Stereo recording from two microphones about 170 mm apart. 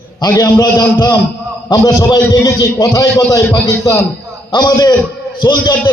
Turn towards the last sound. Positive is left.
turn(degrees=25)  # may be behind; listen again after turning